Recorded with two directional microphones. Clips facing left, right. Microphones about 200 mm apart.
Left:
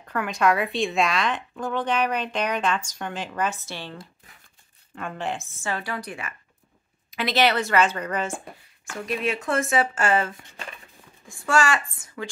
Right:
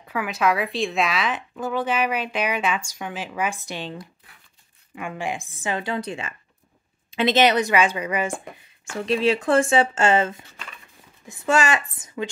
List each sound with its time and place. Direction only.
0.0 s a woman's voice: 5° right (ahead or behind)
8.8 s speech: 30° right (ahead or behind)